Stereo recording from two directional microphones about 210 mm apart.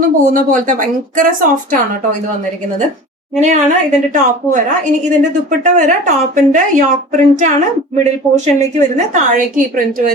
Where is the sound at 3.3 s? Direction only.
35° right (ahead or behind).